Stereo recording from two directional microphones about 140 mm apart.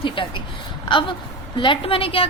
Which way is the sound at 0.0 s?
35° left (ahead or behind).